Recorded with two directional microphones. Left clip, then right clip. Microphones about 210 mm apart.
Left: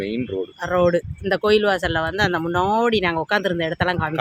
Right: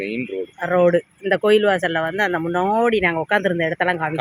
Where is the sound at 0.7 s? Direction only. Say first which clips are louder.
Right 2 dB; 10° right (ahead or behind).